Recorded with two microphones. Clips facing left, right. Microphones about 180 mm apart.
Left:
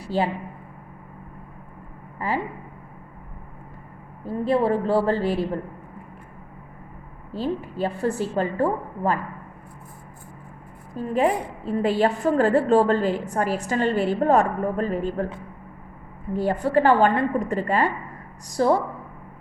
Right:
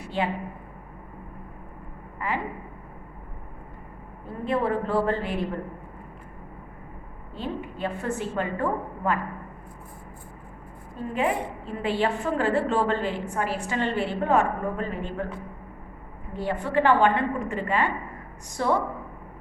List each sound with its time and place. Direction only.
0.0 s a woman's voice: 35° left (ahead or behind)
2.1 s a sound: 35° left (ahead or behind)
4.3 s a woman's voice: 30° left (ahead or behind)
7.3 s a woman's voice: 35° left (ahead or behind)
11.1 s a woman's voice: 40° left (ahead or behind)
16.3 s a woman's voice: 40° left (ahead or behind)